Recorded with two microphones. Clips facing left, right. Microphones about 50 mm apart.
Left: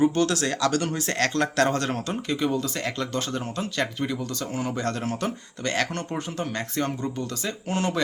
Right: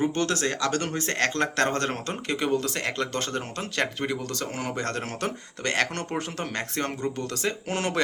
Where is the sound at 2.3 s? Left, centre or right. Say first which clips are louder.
Right 1 dB; right.